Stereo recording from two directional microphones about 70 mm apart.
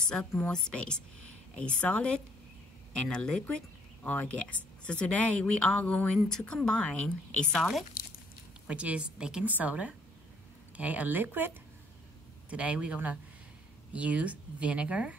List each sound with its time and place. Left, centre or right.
0.1 s a woman's voice: centre
7.5 s speech: centre
8.6 s speech: centre